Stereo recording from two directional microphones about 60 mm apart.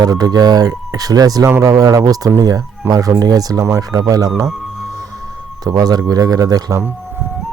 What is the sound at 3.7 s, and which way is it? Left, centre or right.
Speech, right.